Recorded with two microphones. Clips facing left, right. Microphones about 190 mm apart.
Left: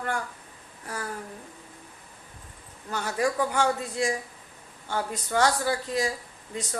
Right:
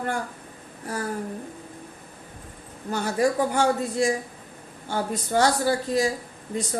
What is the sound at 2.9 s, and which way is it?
A woman's voice, 30° right (ahead or behind).